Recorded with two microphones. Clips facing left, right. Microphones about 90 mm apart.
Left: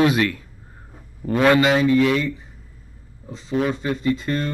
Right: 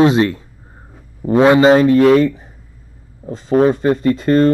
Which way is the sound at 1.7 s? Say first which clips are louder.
Right 8 dB; 45° right (ahead or behind).